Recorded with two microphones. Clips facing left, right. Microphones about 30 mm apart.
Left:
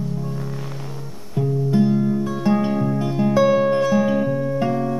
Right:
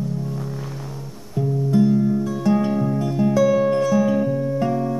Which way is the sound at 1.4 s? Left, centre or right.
Left.